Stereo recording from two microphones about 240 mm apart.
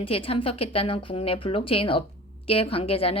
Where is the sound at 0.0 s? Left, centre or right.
Left.